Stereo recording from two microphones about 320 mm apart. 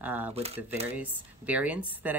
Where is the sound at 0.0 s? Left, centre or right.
Centre.